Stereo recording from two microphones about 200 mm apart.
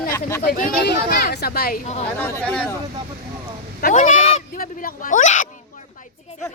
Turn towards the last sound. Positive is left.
turn(degrees=40)  # may be behind; listen again after turning